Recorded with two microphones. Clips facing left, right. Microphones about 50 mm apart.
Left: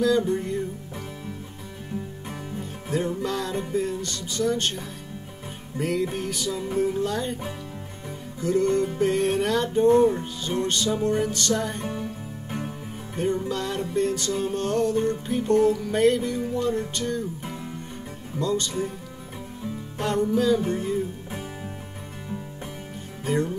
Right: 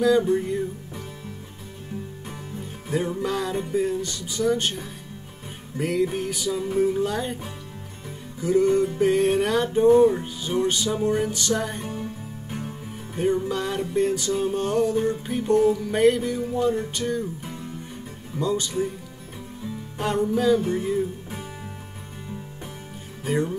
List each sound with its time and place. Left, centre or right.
0.0 s music: centre
2.9 s music: centre
8.4 s music: centre
12.4 s music: left
13.2 s music: centre
18.4 s music: centre
20.0 s music: centre
23.2 s speech: centre